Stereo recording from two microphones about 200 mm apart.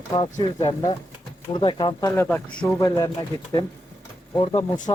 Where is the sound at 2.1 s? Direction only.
10° left (ahead or behind).